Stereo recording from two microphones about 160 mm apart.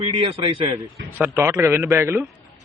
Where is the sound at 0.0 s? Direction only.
35° right (ahead or behind).